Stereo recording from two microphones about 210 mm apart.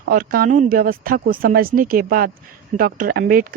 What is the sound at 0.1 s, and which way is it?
A woman's voice, 45° right (ahead or behind).